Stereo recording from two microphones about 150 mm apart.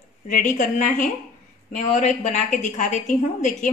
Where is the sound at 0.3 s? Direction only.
60° left (ahead or behind).